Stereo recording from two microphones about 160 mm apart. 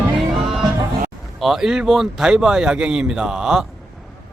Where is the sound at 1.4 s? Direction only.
Centre (ahead or behind).